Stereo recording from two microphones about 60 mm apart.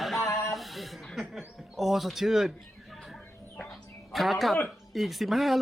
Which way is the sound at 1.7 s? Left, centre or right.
Centre.